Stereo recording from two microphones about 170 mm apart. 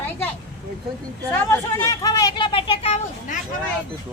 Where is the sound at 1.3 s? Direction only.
15° left (ahead or behind); by 3.4 s 40° left (ahead or behind).